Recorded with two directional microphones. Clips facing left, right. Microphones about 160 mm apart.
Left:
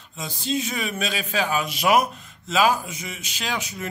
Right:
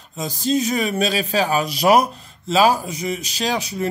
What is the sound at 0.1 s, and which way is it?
Speech, 40° right (ahead or behind).